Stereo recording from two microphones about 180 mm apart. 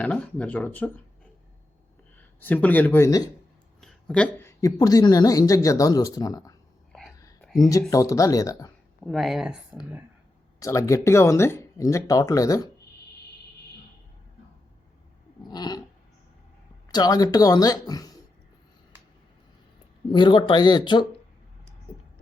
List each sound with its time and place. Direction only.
0.0 s speech: 5° left (ahead or behind)
2.1 s speech: 10° left (ahead or behind)
3.8 s a woman's voice: 5° left (ahead or behind); by 6.5 s 20° left (ahead or behind)
7.4 s a sound: centre (ahead or behind)
7.7 s speech: 15° left (ahead or behind)
9.0 s speech: centre (ahead or behind)
10.6 s speech: 20° left (ahead or behind)
15.4 s cat: 20° left (ahead or behind)
16.9 s speech: 20° left (ahead or behind)
20.1 s speech: 25° left (ahead or behind)